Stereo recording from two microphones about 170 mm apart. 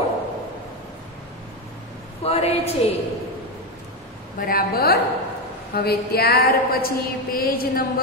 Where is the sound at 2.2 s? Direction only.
35° left (ahead or behind).